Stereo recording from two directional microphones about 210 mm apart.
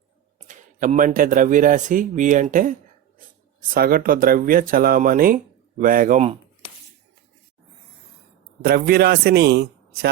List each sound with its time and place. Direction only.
0.4 s speech: 35° right (ahead or behind)
3.8 s speech: 45° right (ahead or behind)
8.6 s speech: 45° right (ahead or behind)